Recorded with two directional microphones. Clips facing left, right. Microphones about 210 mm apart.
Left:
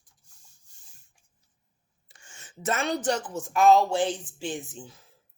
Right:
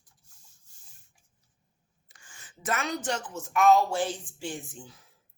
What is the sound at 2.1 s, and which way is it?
Speech, 25° left (ahead or behind).